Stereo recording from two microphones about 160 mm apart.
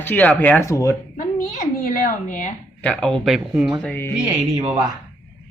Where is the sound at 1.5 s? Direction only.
55° left (ahead or behind).